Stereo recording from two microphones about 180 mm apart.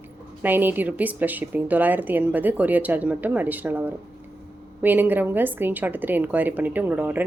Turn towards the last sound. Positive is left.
turn(degrees=-10)  # may be behind; listen again after turning